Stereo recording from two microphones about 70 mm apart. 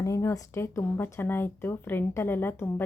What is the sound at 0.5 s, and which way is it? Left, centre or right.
A woman's voice, left.